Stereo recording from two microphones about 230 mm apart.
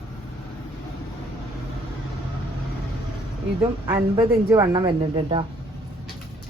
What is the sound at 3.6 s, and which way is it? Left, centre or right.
A woman's voice, centre.